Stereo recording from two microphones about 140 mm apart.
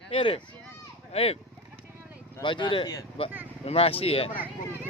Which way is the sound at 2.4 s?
35° left (ahead or behind).